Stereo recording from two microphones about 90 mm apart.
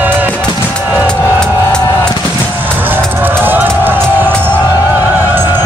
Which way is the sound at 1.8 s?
30° left (ahead or behind).